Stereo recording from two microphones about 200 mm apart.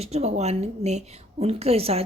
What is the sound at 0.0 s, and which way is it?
A woman's voice, 30° right (ahead or behind).